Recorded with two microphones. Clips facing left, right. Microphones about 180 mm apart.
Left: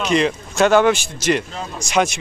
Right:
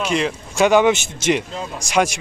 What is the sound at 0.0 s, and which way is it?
Speech, 5° right (ahead or behind).